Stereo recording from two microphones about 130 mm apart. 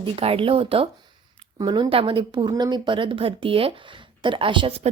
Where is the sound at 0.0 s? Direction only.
45° right (ahead or behind).